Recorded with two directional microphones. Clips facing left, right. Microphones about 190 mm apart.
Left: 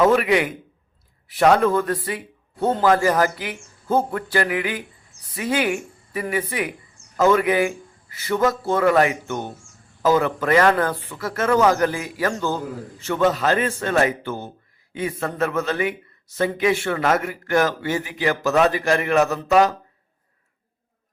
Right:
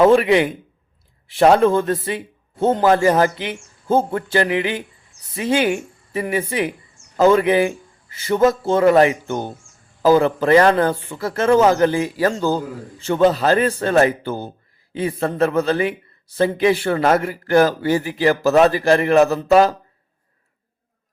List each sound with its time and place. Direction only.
0.0 s a man's voice: 25° right (ahead or behind)